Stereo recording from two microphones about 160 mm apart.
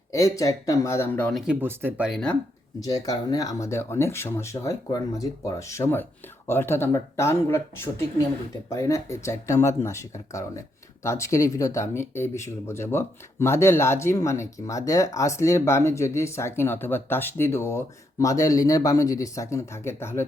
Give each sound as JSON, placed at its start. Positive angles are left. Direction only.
{"t": 0.1, "sound": "speech", "side_deg": 20}
{"t": 1.3, "sound": "speech", "side_deg": 0}
{"t": 2.8, "sound": "speech", "side_deg": 20}